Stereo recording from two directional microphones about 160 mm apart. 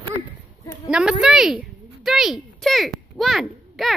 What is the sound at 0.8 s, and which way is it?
Speech, 5° right (ahead or behind).